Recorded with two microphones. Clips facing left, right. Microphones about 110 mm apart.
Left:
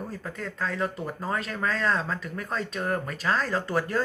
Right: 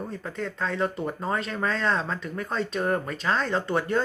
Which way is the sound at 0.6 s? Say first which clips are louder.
Right 1 dB; 30° right (ahead or behind).